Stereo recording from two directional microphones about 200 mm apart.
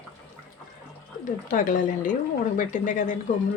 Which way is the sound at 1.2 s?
40° left (ahead or behind).